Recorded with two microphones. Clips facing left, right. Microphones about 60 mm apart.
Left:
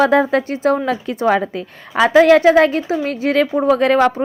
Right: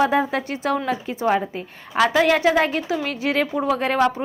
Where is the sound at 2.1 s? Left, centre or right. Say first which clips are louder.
Left 10 dB; left.